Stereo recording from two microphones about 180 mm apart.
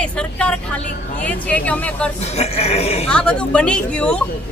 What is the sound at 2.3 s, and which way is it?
Speech, 35° left (ahead or behind).